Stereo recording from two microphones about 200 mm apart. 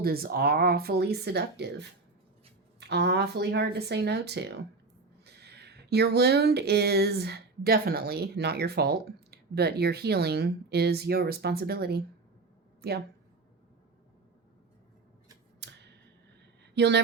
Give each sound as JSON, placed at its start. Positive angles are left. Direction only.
{"t": 0.0, "sound": "speech", "side_deg": -50}
{"t": 15.6, "sound": "a sound", "side_deg": -60}
{"t": 16.7, "sound": "speech", "side_deg": -60}